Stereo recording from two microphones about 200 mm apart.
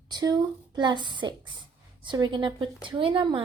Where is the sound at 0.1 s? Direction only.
20° right (ahead or behind).